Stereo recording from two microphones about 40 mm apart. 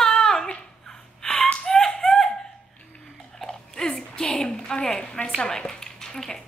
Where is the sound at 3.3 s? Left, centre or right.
Centre.